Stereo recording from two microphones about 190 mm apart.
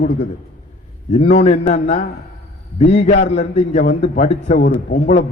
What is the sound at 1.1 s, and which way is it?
A man's voice, 35° left (ahead or behind).